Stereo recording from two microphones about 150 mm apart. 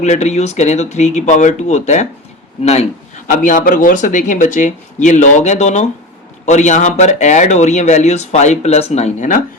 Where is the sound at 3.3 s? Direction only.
60° left (ahead or behind).